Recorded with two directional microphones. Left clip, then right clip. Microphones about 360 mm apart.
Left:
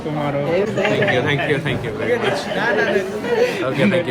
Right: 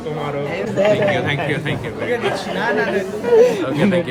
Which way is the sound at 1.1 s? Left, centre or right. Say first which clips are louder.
Left 1 dB; centre.